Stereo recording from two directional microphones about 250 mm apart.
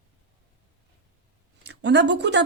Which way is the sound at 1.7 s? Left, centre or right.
Right.